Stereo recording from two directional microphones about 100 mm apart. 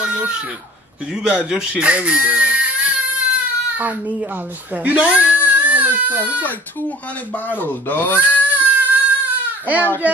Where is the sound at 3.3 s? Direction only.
15° right (ahead or behind).